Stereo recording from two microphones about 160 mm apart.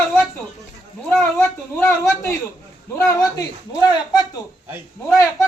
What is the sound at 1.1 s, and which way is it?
A man's voice, 10° left (ahead or behind).